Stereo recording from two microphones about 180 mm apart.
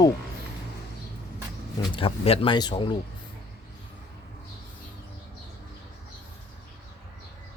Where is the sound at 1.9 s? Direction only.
30° left (ahead or behind).